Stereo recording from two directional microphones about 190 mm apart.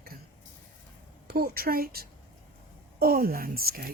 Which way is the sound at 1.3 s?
50° right (ahead or behind).